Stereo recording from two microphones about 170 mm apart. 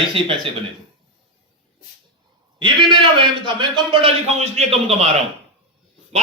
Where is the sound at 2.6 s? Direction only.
30° right (ahead or behind).